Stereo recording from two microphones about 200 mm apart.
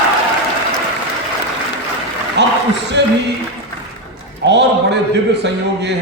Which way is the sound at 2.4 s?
60° right (ahead or behind).